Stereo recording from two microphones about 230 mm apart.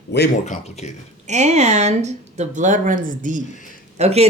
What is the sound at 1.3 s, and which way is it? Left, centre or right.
Speech, right.